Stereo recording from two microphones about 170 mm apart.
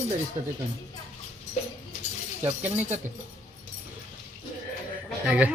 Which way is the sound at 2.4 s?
10° right (ahead or behind).